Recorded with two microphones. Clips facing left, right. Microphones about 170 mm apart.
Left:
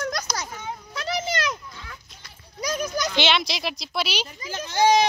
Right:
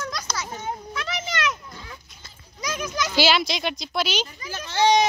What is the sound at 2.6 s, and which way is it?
Children playing, 35° left (ahead or behind).